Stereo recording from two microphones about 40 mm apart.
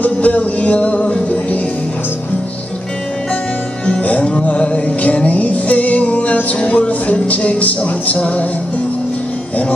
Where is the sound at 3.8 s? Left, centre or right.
Left.